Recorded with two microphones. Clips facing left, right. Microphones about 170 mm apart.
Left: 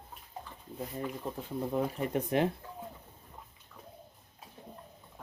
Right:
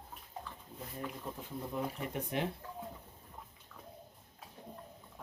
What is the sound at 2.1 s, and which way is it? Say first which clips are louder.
Speech: left 10 dB; 75° left (ahead or behind).